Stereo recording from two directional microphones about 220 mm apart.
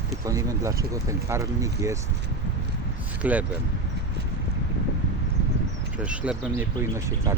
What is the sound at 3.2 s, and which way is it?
Speech, 5° right (ahead or behind).